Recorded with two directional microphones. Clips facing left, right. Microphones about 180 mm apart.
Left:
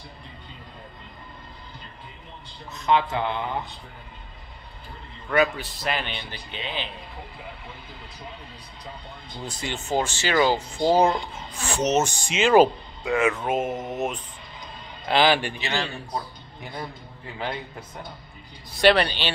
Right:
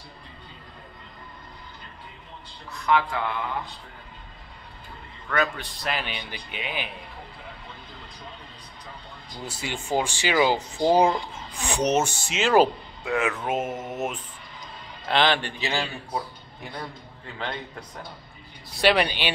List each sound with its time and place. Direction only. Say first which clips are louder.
2.7 s a man's voice: left 1 dB; 20° left (ahead or behind)
5.3 s a man's voice: left 4 dB; 10° left (ahead or behind); by 6.9 s 10° right (ahead or behind)
9.4 s a man's voice: left 1 dB; 10° right (ahead or behind)
12.2 s speech: left 4 dB; centre (ahead or behind)
15.7 s a man's voice: even; 10° right (ahead or behind)
17.4 s a man's voice: left 2 dB; 5° left (ahead or behind)
18.8 s a man's voice: left 2 dB; 10° right (ahead or behind)